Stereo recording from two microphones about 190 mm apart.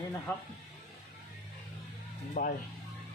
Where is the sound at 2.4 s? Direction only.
50° left (ahead or behind).